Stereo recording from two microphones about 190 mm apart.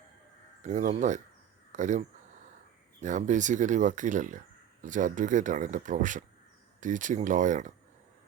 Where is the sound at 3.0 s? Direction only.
40° right (ahead or behind).